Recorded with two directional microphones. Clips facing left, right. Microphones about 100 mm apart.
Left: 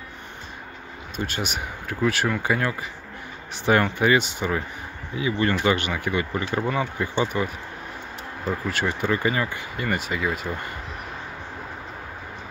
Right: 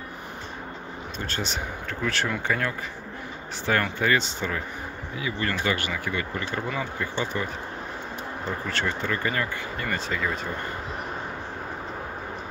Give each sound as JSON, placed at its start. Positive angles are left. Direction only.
{"t": 1.1, "sound": "speech", "side_deg": 15}
{"t": 8.5, "sound": "speech", "side_deg": 10}